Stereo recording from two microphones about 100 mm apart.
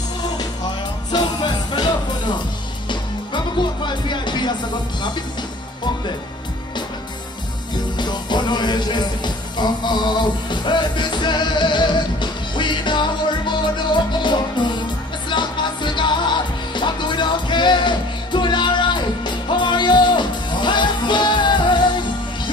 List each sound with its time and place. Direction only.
1.1 s music: 45° left (ahead or behind)
8.0 s music: 50° left (ahead or behind)